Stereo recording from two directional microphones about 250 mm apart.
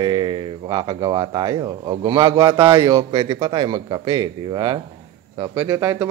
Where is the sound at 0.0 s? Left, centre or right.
Centre.